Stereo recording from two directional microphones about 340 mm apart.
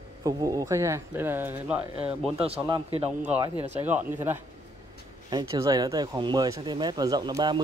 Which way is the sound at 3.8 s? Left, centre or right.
Centre.